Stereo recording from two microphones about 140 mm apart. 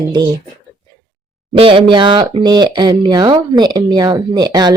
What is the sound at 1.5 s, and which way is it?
Speech, 40° right (ahead or behind).